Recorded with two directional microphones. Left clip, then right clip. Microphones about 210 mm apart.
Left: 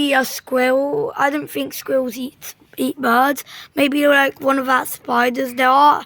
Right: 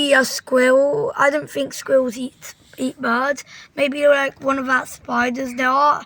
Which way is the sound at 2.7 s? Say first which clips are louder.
Left 4 dB; 45° left (ahead or behind).